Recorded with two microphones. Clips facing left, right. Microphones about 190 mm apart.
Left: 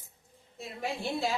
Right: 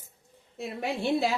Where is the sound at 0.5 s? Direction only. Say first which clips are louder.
Right 4 dB; 65° right (ahead or behind).